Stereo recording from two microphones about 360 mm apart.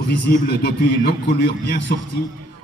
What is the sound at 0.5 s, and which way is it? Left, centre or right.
Speech, left.